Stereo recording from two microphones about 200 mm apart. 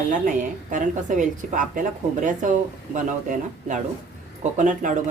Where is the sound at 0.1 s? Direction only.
40° right (ahead or behind).